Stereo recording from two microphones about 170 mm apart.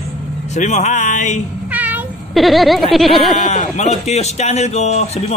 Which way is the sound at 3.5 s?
45° left (ahead or behind).